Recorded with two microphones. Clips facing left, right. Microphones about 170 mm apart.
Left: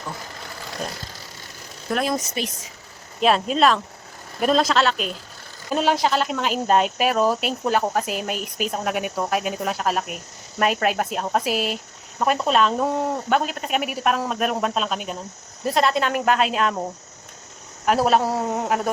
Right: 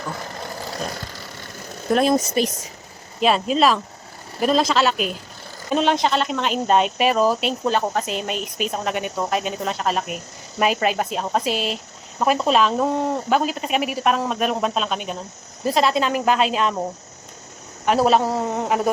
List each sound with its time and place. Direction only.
1.9 s speech: 25° right (ahead or behind)
2.4 s speech: 40° right (ahead or behind)
3.2 s speech: centre (ahead or behind)
5.7 s speech: 5° left (ahead or behind)
17.8 s speech: centre (ahead or behind)